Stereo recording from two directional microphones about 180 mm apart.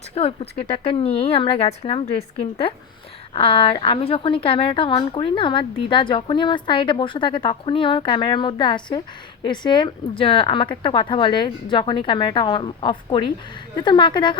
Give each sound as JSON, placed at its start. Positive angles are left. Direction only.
{"t": 0.1, "sound": "a woman's voice", "side_deg": 35}